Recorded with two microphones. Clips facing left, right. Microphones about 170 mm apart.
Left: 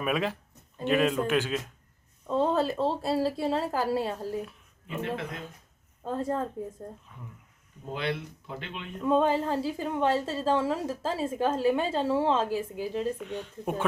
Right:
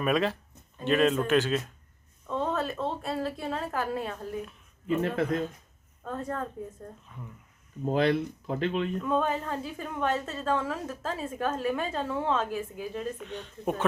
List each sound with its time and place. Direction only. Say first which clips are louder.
0.0 s a man's voice: right 2 dB; 10° left (ahead or behind)
2.2 s speech: left 4 dB; 30° left (ahead or behind)
6.0 s a woman's voice: left 4 dB; 30° left (ahead or behind)
7.9 s speech: right 7 dB; 40° right (ahead or behind)
9.0 s a woman's voice: left 4 dB; 30° left (ahead or behind)
13.1 s a man's voice: left 3 dB; 10° left (ahead or behind)